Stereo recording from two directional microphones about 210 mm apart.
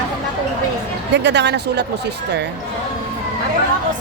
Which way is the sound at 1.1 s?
55° right (ahead or behind).